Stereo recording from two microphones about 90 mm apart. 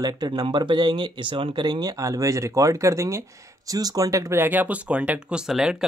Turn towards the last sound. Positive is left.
turn(degrees=-5)  # may be behind; listen again after turning